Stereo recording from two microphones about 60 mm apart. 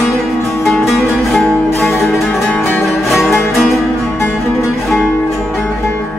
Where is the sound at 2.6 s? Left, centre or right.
Left.